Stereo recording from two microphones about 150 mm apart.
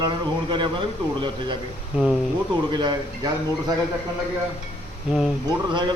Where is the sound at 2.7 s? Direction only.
30° right (ahead or behind).